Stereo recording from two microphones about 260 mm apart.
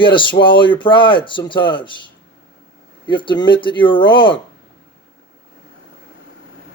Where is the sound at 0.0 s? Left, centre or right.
Centre.